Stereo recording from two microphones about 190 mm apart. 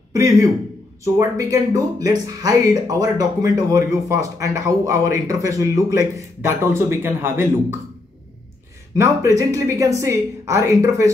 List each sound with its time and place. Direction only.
0.1 s a man's voice: 15° right (ahead or behind)
8.9 s speech: 15° right (ahead or behind)